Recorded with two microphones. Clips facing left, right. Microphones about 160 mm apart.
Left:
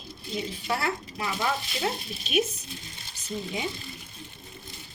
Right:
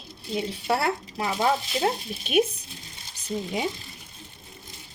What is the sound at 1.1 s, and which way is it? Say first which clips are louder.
Speech: right 8 dB; 45° right (ahead or behind).